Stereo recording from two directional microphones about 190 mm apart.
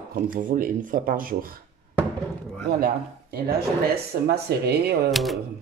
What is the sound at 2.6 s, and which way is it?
Speech, 50° right (ahead or behind).